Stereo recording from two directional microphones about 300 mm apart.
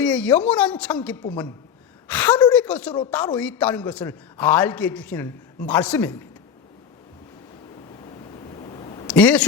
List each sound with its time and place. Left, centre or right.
0.0 s a man's voice: centre
8.0 s a sound: centre
9.0 s speech: centre